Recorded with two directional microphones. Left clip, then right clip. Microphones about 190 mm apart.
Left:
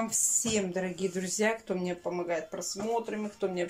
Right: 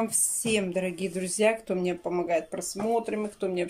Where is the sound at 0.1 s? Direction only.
10° right (ahead or behind).